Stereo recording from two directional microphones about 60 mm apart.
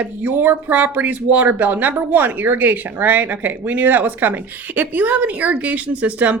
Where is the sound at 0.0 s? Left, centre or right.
Right.